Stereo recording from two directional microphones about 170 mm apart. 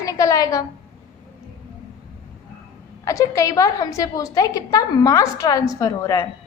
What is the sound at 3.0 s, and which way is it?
A woman's voice, 20° left (ahead or behind).